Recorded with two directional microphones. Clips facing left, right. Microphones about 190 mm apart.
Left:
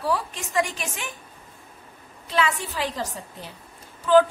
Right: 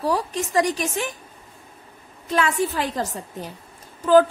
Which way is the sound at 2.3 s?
50° right (ahead or behind).